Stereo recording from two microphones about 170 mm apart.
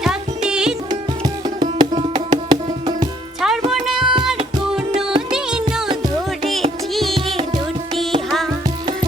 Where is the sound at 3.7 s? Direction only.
Centre (ahead or behind).